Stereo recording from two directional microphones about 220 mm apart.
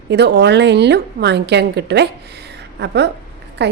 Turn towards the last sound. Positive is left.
turn(degrees=-50)  # may be behind; listen again after turning